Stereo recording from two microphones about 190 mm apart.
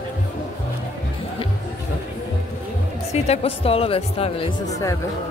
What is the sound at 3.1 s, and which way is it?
Speech, 35° left (ahead or behind).